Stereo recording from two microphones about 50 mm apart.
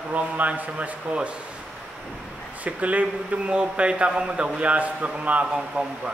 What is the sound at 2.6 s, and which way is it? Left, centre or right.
A man's voice, right.